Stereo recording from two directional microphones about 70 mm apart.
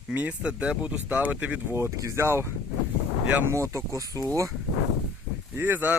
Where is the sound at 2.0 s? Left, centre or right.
Right.